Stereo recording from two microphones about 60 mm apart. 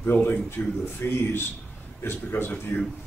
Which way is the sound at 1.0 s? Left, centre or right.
Left.